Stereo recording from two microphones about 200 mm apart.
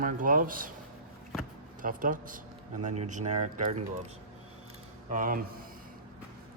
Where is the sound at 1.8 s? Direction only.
45° right (ahead or behind).